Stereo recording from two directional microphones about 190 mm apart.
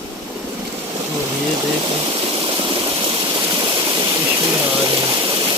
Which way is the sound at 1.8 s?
25° right (ahead or behind).